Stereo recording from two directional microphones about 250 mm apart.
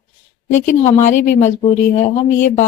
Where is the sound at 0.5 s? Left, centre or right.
Left.